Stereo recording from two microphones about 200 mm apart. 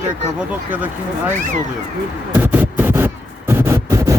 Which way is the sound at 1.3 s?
40° right (ahead or behind).